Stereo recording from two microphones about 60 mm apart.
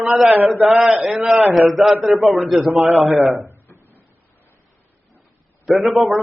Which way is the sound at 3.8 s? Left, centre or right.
Left.